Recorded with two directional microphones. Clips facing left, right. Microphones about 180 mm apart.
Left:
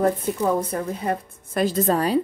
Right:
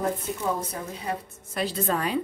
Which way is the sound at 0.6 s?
55° left (ahead or behind).